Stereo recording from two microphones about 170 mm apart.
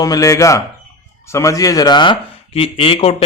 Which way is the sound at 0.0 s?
20° left (ahead or behind).